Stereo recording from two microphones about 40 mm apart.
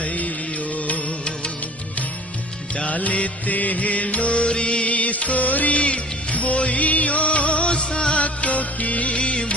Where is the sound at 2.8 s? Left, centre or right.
Left.